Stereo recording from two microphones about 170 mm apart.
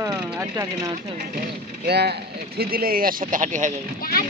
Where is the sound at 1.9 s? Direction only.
75° right (ahead or behind).